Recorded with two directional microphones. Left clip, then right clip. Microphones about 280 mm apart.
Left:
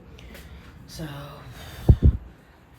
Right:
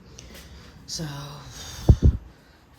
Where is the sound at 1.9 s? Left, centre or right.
Left.